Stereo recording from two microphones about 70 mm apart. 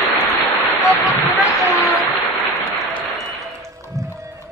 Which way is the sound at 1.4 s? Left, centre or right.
Left.